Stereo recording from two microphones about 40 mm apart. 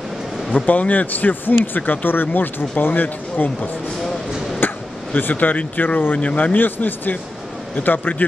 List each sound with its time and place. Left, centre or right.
0.5 s speech: left
4.6 s speech: left
6.1 s speech: left
6.5 s speech: left